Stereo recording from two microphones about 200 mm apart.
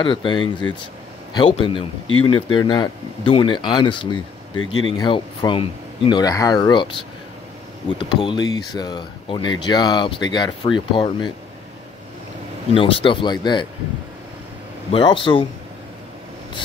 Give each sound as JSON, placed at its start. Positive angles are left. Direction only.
{"t": 0.0, "sound": "speech", "side_deg": 25}
{"t": 2.0, "sound": "speech", "side_deg": 90}
{"t": 2.5, "sound": "speech", "side_deg": 20}
{"t": 4.6, "sound": "speech", "side_deg": 90}
{"t": 4.9, "sound": "speech", "side_deg": 20}
{"t": 8.2, "sound": "speech", "side_deg": 20}
{"t": 12.7, "sound": "speech", "side_deg": 25}
{"t": 14.9, "sound": "speech", "side_deg": 25}